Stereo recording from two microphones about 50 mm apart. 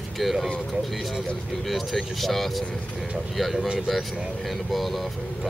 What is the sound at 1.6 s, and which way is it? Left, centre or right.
Speech, centre.